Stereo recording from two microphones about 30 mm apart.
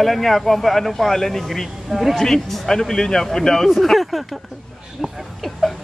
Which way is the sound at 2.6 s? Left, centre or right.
Left.